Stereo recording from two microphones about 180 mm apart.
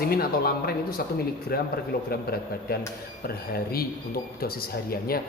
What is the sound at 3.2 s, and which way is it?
Speech, 55° left (ahead or behind).